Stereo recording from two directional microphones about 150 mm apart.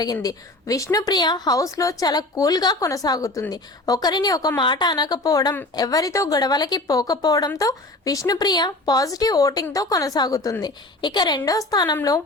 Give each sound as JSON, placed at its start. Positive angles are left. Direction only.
{"t": 0.0, "sound": "a woman's voice", "side_deg": 25}